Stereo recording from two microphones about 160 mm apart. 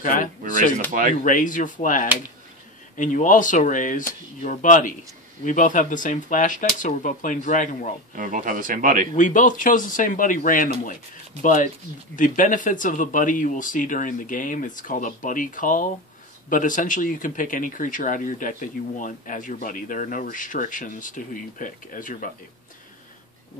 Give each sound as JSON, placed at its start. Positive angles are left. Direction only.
{"t": 0.0, "sound": "speech", "side_deg": 55}
{"t": 8.1, "sound": "speech", "side_deg": -55}
{"t": 9.1, "sound": "speech", "side_deg": 55}